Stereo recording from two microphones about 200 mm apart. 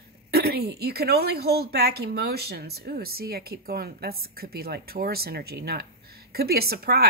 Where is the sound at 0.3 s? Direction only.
50° right (ahead or behind).